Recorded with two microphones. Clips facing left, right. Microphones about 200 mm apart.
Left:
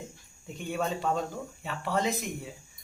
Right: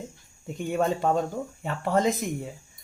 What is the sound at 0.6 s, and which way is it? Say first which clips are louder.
Speech: right 6 dB; 45° right (ahead or behind).